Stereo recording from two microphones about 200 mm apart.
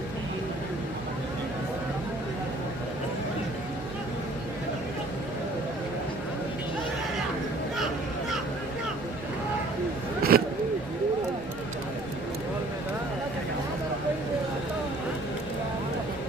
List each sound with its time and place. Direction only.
10.3 s vehicle: 50° right (ahead or behind)